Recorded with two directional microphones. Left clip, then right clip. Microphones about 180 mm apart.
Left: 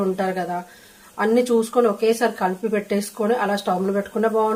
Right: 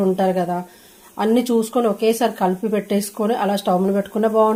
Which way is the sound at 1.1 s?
45° right (ahead or behind).